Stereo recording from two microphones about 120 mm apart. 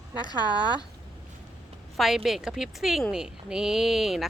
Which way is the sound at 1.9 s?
Centre (ahead or behind).